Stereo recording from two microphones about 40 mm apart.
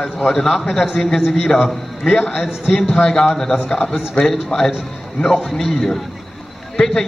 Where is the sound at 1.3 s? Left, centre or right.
Centre.